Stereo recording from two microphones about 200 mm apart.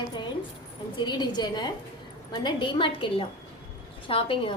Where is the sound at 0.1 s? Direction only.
20° left (ahead or behind).